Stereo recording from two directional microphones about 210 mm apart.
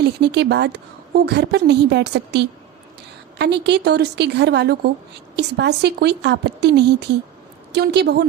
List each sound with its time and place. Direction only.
0.0 s a woman's voice: 55° right (ahead or behind)